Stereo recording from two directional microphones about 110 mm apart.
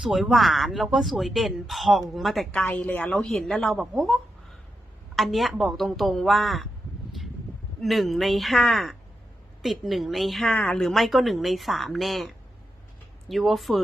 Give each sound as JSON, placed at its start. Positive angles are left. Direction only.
{"t": 0.0, "sound": "speech", "side_deg": 0}
{"t": 7.8, "sound": "speech", "side_deg": 0}